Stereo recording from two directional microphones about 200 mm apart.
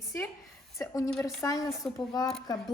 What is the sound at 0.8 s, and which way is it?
A woman's voice, 15° left (ahead or behind).